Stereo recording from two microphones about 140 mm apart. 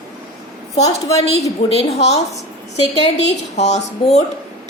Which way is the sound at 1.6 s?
50° left (ahead or behind).